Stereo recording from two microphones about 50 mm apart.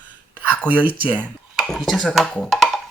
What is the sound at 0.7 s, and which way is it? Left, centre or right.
Speech, right.